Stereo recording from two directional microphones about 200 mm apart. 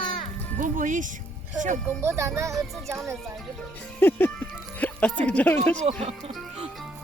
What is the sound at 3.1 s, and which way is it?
Music, centre (ahead or behind).